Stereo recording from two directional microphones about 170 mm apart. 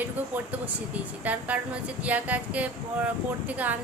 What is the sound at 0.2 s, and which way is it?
A woman's voice, 10° right (ahead or behind).